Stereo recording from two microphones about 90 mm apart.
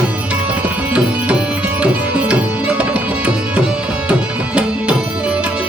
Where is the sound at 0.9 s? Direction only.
15° right (ahead or behind).